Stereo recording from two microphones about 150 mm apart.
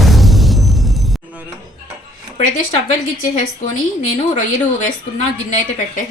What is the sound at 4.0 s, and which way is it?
A woman's voice, 55° left (ahead or behind).